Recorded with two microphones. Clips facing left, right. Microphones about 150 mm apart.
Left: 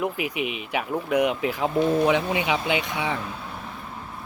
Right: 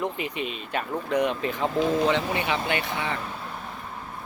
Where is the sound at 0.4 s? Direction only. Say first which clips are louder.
Left 3 dB; 70° left (ahead or behind).